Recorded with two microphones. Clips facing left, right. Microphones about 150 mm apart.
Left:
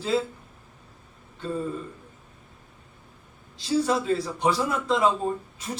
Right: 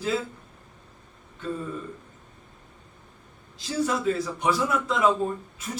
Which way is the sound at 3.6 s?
30° left (ahead or behind).